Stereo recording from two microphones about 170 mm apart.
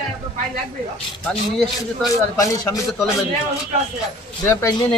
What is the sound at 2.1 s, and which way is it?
Speech, 20° left (ahead or behind).